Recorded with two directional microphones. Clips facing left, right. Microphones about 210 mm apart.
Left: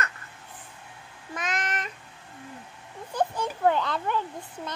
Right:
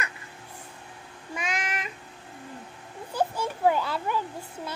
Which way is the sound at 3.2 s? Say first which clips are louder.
Even; 10° right (ahead or behind).